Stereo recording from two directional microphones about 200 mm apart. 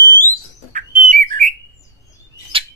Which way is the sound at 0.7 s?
40° right (ahead or behind).